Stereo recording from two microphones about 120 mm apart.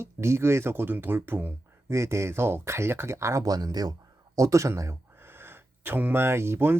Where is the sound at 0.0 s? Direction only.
20° right (ahead or behind).